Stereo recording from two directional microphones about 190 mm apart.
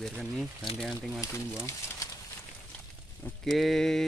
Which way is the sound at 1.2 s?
15° left (ahead or behind).